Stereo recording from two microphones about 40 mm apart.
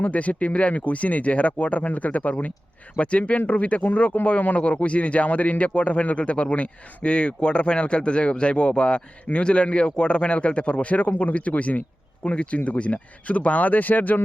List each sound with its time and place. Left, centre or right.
0.0 s speech: left